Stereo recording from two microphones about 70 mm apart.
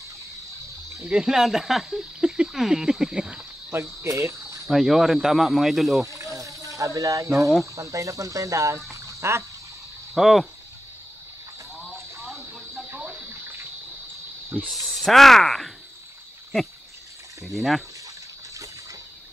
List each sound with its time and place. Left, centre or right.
1.0 s speech: centre
3.7 s cricket: right
4.1 s speech: right
4.6 s speech: centre
6.0 s a sound: right
6.7 s speech: right
8.9 s a sound: right
10.1 s speech: centre
12.8 s bathtub: right
14.7 s speech: centre
17.5 s speech: centre
18.5 s a sound: right